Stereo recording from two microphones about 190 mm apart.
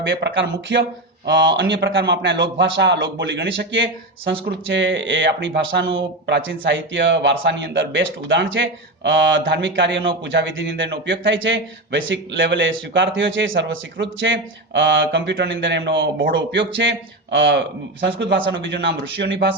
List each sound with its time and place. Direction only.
0.0 s speech: 75° right (ahead or behind)